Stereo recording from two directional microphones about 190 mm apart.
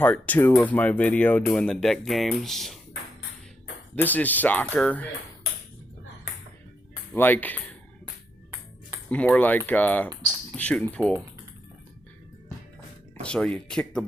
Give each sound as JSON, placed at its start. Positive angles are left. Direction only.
{"t": 0.0, "sound": "speech", "side_deg": 10}
{"t": 3.9, "sound": "speech", "side_deg": 10}
{"t": 7.1, "sound": "speech", "side_deg": 10}
{"t": 9.0, "sound": "speech", "side_deg": 5}
{"t": 13.2, "sound": "speech", "side_deg": 5}